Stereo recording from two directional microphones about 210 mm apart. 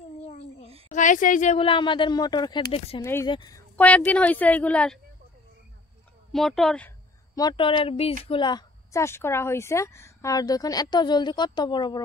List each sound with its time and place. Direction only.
0.8 s speech: 35° left (ahead or behind)
3.0 s a woman's voice: 15° left (ahead or behind)
3.7 s a woman's voice: 5° left (ahead or behind)
6.3 s speech: centre (ahead or behind)
7.3 s a woman's voice: 20° left (ahead or behind)